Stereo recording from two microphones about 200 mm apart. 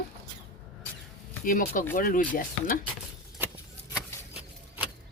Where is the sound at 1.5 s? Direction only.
45° left (ahead or behind).